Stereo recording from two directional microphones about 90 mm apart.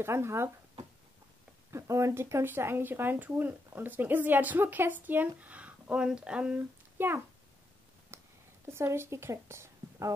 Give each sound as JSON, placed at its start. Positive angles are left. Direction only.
{"t": 0.0, "sound": "speech", "side_deg": -30}
{"t": 1.7, "sound": "speech", "side_deg": -35}
{"t": 7.0, "sound": "speech", "side_deg": -20}
{"t": 8.1, "sound": "a sound", "side_deg": -30}
{"t": 8.6, "sound": "speech", "side_deg": -30}